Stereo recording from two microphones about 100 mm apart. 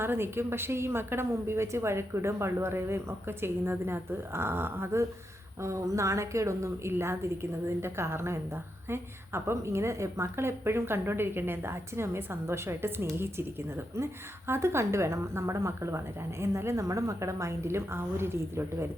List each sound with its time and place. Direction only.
0.0 s a woman's voice: 25° right (ahead or behind)